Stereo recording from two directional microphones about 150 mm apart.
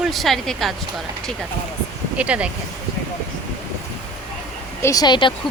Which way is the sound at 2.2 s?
10° right (ahead or behind).